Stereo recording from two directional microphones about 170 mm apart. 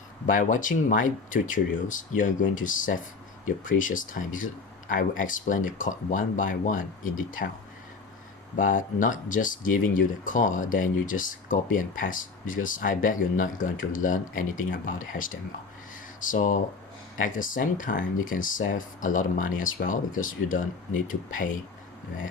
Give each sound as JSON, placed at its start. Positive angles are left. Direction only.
{"t": 0.3, "sound": "speech", "side_deg": 50}
{"t": 8.5, "sound": "speech", "side_deg": 50}